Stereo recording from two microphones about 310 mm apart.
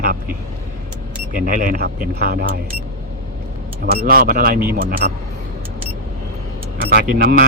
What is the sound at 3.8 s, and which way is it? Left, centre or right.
A man's voice, right.